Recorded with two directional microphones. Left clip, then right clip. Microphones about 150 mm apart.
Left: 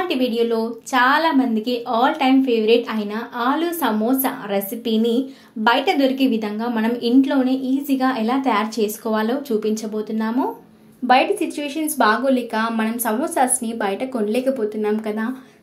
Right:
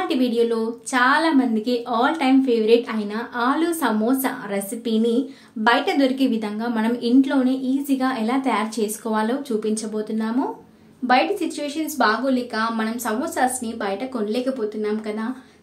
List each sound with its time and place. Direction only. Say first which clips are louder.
0.1 s a woman's voice: right 1 dB; centre (ahead or behind)
11.1 s a woman's voice: left 3 dB; 20° left (ahead or behind)